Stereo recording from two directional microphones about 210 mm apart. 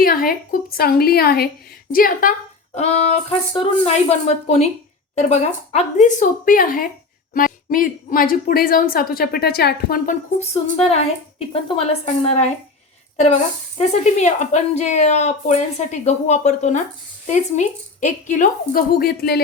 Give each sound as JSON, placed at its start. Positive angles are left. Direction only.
{"t": 0.0, "sound": "speech", "side_deg": 45}
{"t": 2.7, "sound": "a woman's voice", "side_deg": 30}
{"t": 10.4, "sound": "a woman's voice", "side_deg": 30}
{"t": 13.7, "sound": "a woman's voice", "side_deg": 35}